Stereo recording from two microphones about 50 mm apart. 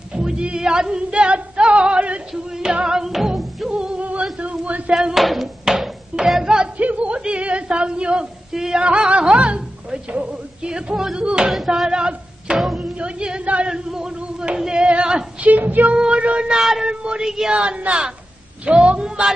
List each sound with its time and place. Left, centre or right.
0.1 s music: centre
3.7 s music: right
5.1 s hands: centre
5.7 s music: centre
6.8 s speech: right
11.5 s speech: centre
12.5 s music: centre
13.0 s speech: centre
15.4 s female singing: right
15.9 s speech: right
16.5 s hands: centre
16.8 s speech: right